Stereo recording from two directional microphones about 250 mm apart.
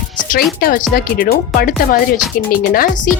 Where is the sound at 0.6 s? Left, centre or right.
Left.